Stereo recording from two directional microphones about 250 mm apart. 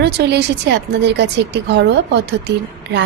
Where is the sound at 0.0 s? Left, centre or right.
Right.